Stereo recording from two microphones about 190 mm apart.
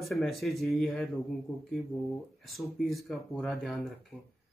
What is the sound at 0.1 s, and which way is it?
Speech, centre (ahead or behind).